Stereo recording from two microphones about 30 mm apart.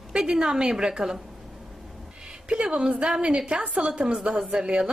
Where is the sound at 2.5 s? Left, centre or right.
Right.